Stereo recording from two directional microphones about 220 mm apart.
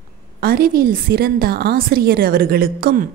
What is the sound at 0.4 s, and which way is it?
A woman's voice, 40° right (ahead or behind).